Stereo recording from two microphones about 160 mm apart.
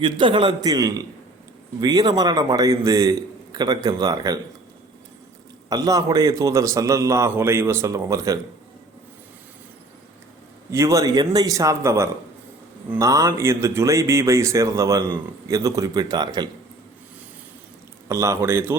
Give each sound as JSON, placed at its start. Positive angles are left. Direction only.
{"t": 0.0, "sound": "speech", "side_deg": -30}
{"t": 5.6, "sound": "speech", "side_deg": -25}
{"t": 10.7, "sound": "speech", "side_deg": -20}
{"t": 18.1, "sound": "a man's voice", "side_deg": -20}